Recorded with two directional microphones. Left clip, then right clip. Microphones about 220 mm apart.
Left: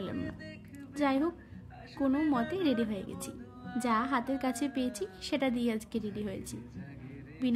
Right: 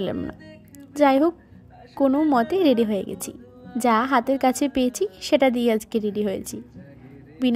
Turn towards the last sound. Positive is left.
turn(degrees=-35)  # may be behind; listen again after turning